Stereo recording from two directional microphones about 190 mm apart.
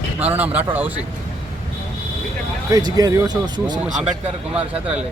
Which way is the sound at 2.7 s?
20° right (ahead or behind).